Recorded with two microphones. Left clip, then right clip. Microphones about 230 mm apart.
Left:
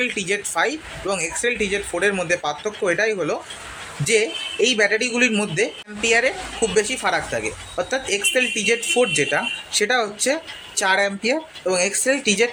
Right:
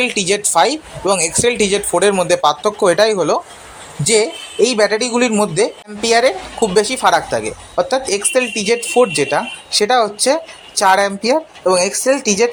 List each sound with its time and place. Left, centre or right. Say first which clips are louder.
0.0 s speech: right 6 dB; centre